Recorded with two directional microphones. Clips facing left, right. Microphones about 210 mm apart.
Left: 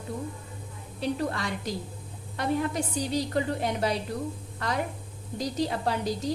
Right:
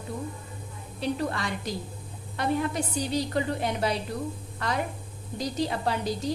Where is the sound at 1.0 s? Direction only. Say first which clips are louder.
Even; 45° left (ahead or behind).